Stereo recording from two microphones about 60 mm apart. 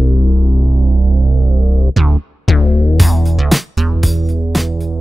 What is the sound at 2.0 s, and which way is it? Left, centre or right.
Music, centre.